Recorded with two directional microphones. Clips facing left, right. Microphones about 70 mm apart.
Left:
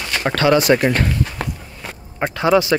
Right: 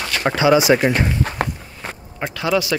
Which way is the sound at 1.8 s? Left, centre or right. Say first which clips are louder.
Right 2 dB; right.